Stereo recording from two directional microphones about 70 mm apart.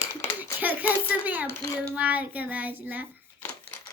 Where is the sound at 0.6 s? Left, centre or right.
Right.